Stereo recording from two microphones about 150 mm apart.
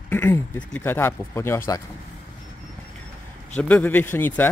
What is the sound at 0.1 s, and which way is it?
Speech, 15° left (ahead or behind).